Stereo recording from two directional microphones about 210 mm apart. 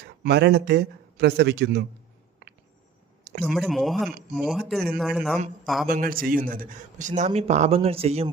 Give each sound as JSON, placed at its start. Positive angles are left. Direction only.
{"t": 0.2, "sound": "speech", "side_deg": -50}
{"t": 3.4, "sound": "speech", "side_deg": 0}
{"t": 5.9, "sound": "speech", "side_deg": -40}